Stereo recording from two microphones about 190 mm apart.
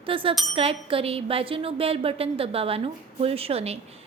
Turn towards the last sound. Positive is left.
turn(degrees=-30)  # may be behind; listen again after turning